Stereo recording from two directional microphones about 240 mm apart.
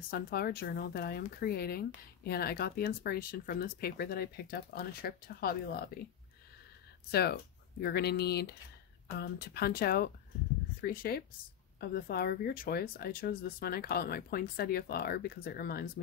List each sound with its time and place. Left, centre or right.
0.1 s speech: left
7.1 s speech: left